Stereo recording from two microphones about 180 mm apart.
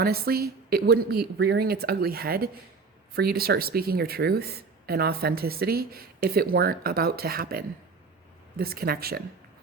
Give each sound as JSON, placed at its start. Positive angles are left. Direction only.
{"t": 0.0, "sound": "speech", "side_deg": -60}